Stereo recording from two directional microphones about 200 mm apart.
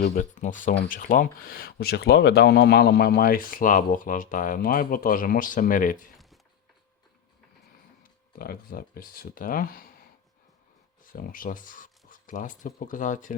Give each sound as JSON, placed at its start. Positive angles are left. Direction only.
{"t": 0.2, "sound": "speech", "side_deg": 40}
{"t": 8.4, "sound": "speech", "side_deg": 45}
{"t": 11.0, "sound": "speech", "side_deg": 45}